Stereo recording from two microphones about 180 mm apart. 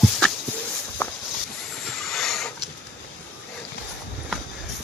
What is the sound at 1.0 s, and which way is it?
Walk, 10° left (ahead or behind).